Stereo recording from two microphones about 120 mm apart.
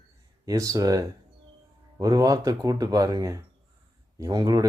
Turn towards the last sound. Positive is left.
turn(degrees=-30)  # may be behind; listen again after turning